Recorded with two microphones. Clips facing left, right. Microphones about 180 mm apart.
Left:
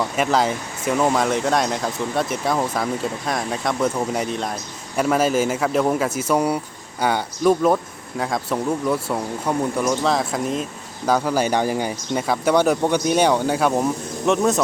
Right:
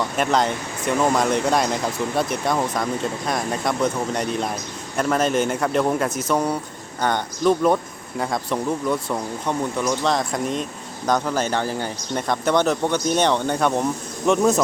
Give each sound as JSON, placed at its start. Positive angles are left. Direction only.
{"t": 0.2, "sound": "speech", "side_deg": 5}